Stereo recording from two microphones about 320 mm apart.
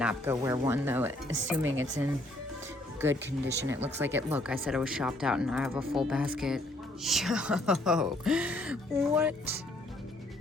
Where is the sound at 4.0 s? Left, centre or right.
Centre.